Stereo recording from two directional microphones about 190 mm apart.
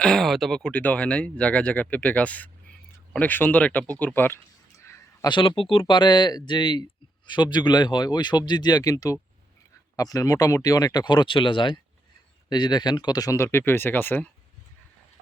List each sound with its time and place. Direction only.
0.0 s speech: centre (ahead or behind)